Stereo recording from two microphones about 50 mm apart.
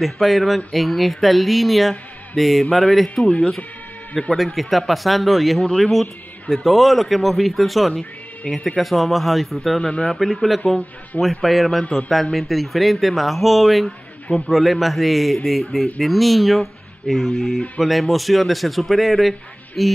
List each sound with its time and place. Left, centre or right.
0.0 s speech: centre
3.3 s speech: left
4.4 s speech: centre
9.8 s speech: left
10.0 s speech: centre